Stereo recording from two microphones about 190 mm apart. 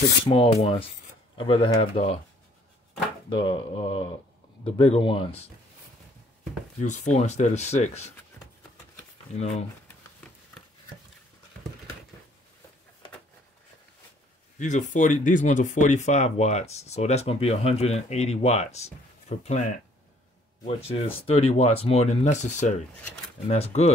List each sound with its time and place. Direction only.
0.3 s speech: 30° left (ahead or behind)
3.3 s speech: 25° left (ahead or behind)
6.8 s speech: 40° left (ahead or behind)
14.6 s speech: 40° left (ahead or behind)